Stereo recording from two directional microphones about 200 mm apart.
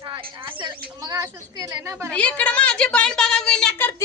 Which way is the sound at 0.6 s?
15° right (ahead or behind).